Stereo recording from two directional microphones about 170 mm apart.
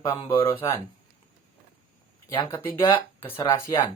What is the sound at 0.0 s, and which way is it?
Speech, 25° left (ahead or behind).